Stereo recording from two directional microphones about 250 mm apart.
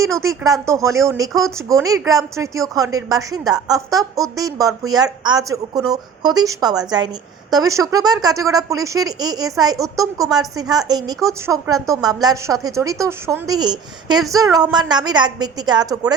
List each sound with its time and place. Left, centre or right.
0.0 s a woman's voice: centre